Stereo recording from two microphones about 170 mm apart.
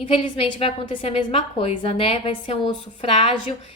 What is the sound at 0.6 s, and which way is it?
Speech, 35° left (ahead or behind).